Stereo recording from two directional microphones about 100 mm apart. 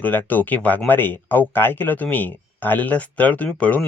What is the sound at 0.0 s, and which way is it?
Speech, 15° left (ahead or behind).